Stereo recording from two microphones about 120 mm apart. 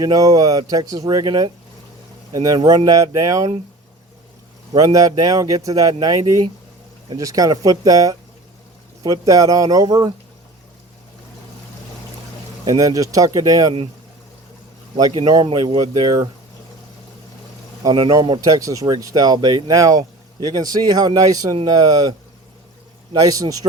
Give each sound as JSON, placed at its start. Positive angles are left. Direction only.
{"t": 0.0, "sound": "speech", "side_deg": -30}
{"t": 4.7, "sound": "speech", "side_deg": -30}
{"t": 12.6, "sound": "speech", "side_deg": -30}
{"t": 14.9, "sound": "speech", "side_deg": -40}
{"t": 17.8, "sound": "speech", "side_deg": -40}
{"t": 23.1, "sound": "speech", "side_deg": -30}